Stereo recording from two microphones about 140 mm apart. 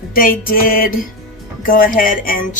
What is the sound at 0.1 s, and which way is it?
Music, 90° left.